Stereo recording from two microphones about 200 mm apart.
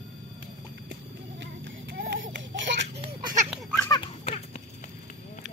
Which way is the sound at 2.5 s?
60° right (ahead or behind).